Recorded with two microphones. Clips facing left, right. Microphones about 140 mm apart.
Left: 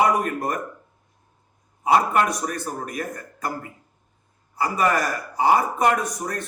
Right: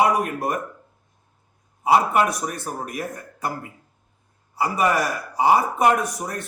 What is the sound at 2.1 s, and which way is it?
A man's voice, 5° right (ahead or behind).